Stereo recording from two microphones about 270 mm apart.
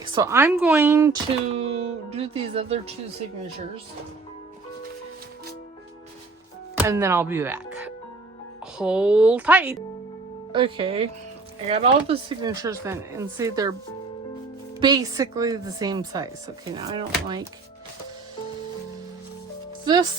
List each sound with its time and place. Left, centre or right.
0.0 s speech: centre
1.3 s speech: right
6.7 s speech: centre
10.5 s speech: centre
14.8 s speech: centre
19.8 s speech: centre